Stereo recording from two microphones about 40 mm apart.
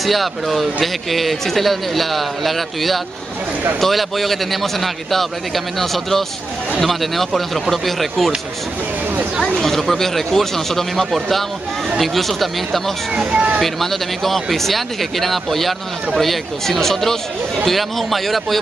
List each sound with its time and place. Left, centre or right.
0.0 s speech: centre
9.6 s speech: centre
13.1 s speech: right
13.6 s speech: centre